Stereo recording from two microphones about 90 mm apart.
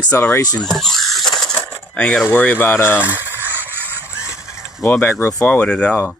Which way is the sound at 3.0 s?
25° right (ahead or behind).